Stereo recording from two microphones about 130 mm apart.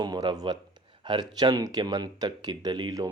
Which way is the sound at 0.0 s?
30° right (ahead or behind).